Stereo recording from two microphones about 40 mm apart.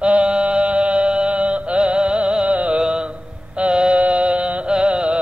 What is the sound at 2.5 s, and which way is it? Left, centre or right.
Music, right.